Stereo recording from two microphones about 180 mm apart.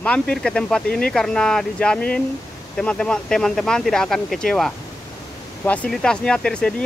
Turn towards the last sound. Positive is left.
turn(degrees=5)  # may be behind; listen again after turning